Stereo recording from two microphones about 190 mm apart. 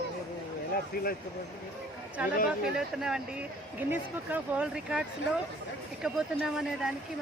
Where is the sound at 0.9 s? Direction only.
50° left (ahead or behind).